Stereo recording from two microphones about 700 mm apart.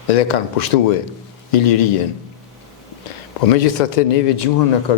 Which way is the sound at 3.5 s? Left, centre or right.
Left.